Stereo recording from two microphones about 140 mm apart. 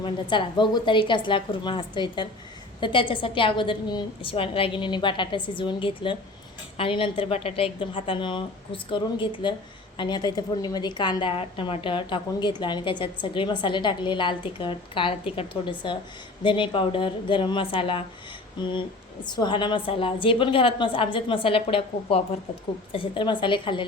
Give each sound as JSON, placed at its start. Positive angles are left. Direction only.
{"t": 0.0, "sound": "a woman's voice", "side_deg": 35}